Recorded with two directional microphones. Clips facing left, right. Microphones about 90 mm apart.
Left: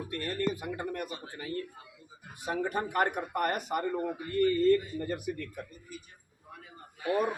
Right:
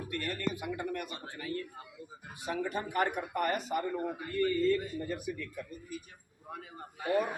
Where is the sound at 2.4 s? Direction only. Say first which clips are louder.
Left 3 dB; 50° left (ahead or behind).